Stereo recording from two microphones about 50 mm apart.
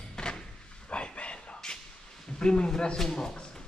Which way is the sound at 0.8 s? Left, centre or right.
Left.